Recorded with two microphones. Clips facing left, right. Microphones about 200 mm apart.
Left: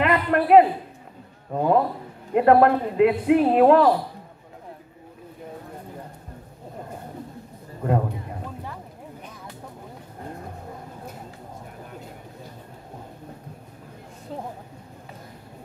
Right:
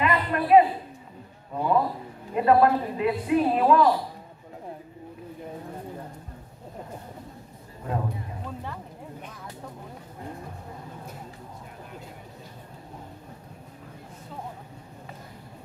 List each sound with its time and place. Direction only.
0.0 s a sound: 70° left (ahead or behind)
1.5 s a man's voice: 50° left (ahead or behind)
2.3 s a man's voice: 65° left (ahead or behind)